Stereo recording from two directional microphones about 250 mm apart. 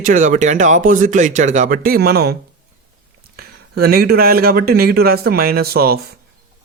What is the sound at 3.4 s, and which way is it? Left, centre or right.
Speech, right.